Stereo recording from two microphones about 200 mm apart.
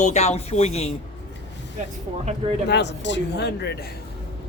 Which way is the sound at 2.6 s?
60° left (ahead or behind).